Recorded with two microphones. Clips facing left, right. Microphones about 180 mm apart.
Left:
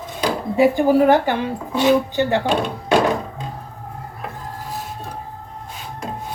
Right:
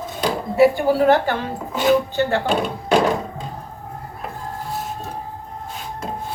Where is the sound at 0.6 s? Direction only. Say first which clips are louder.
Left 1 dB; 15° left (ahead or behind).